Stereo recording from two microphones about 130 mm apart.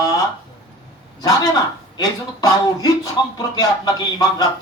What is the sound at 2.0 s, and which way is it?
Speech, 30° left (ahead or behind).